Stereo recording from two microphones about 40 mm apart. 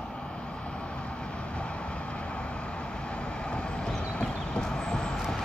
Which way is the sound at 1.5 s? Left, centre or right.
Left.